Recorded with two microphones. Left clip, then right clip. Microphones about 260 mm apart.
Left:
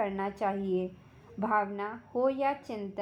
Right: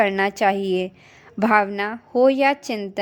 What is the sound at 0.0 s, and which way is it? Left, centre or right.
A woman's voice, right.